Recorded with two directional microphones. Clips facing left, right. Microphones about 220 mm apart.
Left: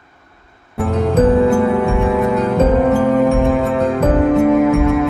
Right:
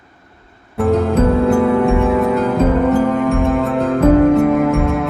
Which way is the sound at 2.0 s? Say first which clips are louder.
Right 1 dB; centre (ahead or behind).